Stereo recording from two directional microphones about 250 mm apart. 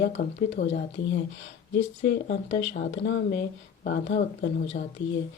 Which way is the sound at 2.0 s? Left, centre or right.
Left.